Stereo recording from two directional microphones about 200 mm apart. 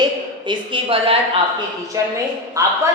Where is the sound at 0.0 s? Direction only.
25° right (ahead or behind).